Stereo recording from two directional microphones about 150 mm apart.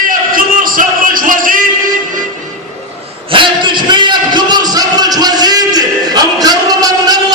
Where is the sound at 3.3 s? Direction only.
30° right (ahead or behind).